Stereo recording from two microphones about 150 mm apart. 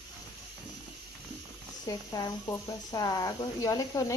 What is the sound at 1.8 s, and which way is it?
Speech, 25° left (ahead or behind).